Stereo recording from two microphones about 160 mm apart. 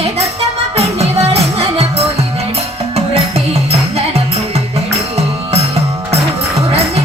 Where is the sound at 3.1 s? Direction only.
40° right (ahead or behind).